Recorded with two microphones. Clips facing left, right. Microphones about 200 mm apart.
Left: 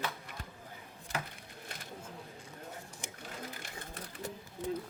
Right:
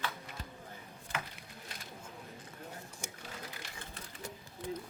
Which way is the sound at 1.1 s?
40° left (ahead or behind).